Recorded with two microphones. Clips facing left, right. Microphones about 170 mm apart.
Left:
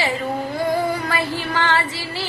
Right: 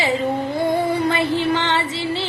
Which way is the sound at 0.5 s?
25° right (ahead or behind).